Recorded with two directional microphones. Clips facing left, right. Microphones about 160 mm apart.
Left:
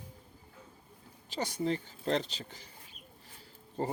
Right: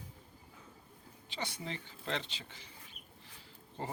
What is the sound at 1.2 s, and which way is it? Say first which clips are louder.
Speech: left 9 dB; 40° left (ahead or behind).